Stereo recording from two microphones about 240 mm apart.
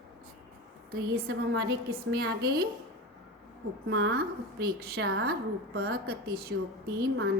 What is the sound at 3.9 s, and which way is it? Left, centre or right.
A woman's voice, right.